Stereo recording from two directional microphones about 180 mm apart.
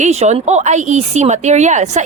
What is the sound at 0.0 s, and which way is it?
A woman's voice, 40° right (ahead or behind).